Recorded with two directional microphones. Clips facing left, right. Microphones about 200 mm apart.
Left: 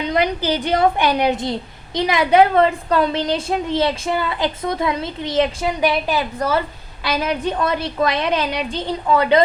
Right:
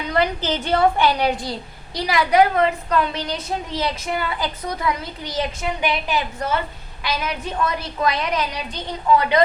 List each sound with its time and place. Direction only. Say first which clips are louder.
0.0 s a woman's voice: left 2 dB; 15° left (ahead or behind)